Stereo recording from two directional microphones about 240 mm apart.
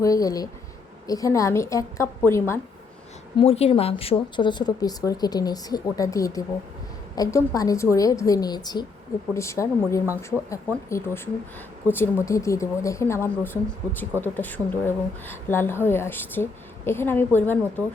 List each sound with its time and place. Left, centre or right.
0.0 s a woman's voice: centre
3.3 s a woman's voice: left; by 17.8 s centre